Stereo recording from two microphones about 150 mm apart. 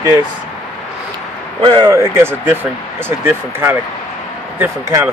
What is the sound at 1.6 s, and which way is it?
Speech, 30° right (ahead or behind).